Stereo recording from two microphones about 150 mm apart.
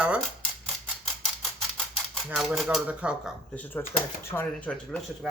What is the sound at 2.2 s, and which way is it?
Speech, centre (ahead or behind).